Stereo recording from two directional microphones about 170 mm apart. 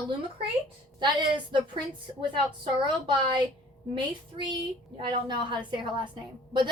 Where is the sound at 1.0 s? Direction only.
30° right (ahead or behind).